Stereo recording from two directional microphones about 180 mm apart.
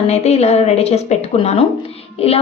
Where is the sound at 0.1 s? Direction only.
35° left (ahead or behind).